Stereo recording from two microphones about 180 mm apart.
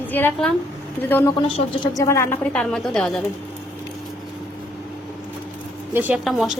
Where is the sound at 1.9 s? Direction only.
15° left (ahead or behind).